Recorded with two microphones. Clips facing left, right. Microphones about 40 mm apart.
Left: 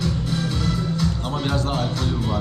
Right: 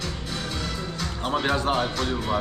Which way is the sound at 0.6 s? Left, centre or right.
Centre.